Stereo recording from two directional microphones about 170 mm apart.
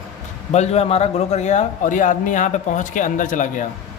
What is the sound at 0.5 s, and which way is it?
A man's voice, 40° left (ahead or behind).